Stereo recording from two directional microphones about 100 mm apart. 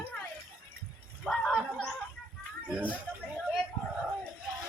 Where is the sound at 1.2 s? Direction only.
5° left (ahead or behind).